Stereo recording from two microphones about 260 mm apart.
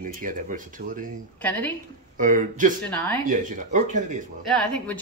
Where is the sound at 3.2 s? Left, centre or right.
Right.